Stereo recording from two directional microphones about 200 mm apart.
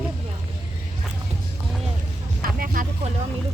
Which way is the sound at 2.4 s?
45° right (ahead or behind).